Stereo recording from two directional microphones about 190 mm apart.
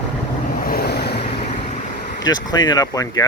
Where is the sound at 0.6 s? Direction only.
55° left (ahead or behind).